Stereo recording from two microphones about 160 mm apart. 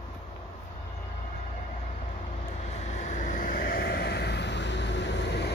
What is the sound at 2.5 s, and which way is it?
Vehicle, 45° left (ahead or behind).